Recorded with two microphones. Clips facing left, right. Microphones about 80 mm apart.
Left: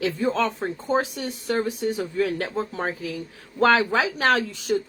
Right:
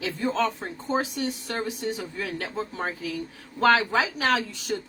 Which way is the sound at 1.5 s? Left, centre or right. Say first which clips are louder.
Left 5 dB; left.